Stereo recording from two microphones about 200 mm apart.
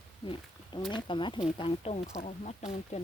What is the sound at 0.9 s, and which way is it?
Speech, 25° left (ahead or behind).